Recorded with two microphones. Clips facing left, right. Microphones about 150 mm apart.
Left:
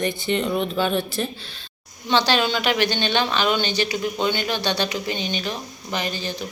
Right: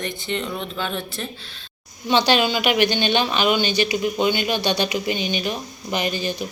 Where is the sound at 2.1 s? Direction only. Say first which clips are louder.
Right 2 dB; 15° right (ahead or behind).